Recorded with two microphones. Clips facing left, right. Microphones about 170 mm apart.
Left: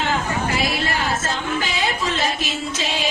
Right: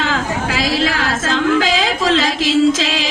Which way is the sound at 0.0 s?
90° right.